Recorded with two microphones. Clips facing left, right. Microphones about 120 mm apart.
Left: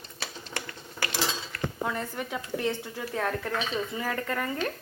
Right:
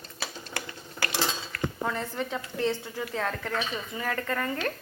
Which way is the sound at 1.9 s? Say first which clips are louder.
Right 1 dB; 10° left (ahead or behind).